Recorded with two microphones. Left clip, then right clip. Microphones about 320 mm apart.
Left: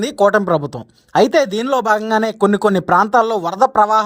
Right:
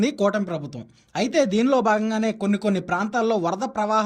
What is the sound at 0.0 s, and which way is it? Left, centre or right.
Speech, centre.